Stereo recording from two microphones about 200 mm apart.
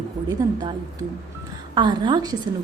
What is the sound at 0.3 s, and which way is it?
A woman's voice, 20° right (ahead or behind).